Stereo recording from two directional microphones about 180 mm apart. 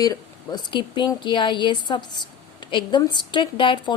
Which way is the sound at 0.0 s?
20° left (ahead or behind).